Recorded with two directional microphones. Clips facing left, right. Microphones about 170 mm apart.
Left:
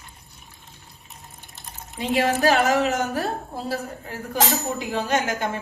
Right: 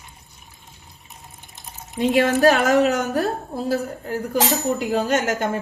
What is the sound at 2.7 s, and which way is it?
A woman's voice, 40° right (ahead or behind).